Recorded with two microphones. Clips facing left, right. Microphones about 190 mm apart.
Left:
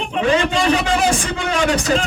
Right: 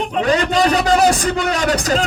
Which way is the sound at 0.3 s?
40° right (ahead or behind).